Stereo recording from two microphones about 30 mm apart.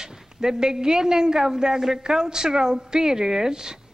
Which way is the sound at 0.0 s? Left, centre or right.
Centre.